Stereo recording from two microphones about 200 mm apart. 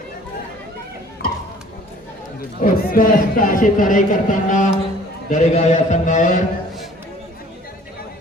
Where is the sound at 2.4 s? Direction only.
45° left (ahead or behind).